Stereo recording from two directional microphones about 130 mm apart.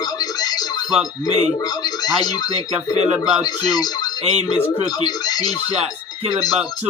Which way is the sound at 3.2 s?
5° right (ahead or behind).